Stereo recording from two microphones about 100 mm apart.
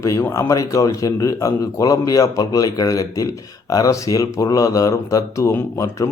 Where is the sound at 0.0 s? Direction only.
30° left (ahead or behind).